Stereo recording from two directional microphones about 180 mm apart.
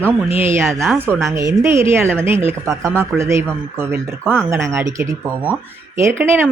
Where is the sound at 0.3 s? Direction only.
15° right (ahead or behind).